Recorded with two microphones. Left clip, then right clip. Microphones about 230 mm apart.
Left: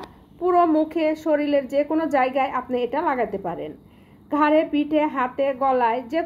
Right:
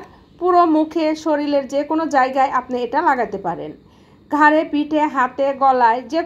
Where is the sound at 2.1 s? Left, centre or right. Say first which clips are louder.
Right 6 dB; centre.